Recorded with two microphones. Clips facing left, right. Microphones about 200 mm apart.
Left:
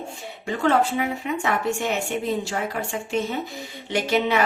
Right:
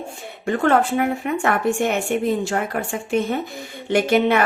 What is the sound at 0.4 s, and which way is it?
Speech, 55° right (ahead or behind).